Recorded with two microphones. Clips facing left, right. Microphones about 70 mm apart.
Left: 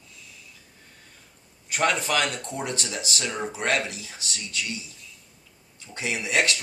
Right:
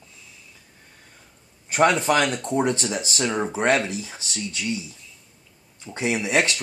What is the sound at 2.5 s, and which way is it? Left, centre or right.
Speech, right.